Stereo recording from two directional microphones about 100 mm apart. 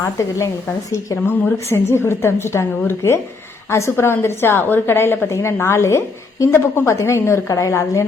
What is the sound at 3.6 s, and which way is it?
A woman's voice, 25° left (ahead or behind).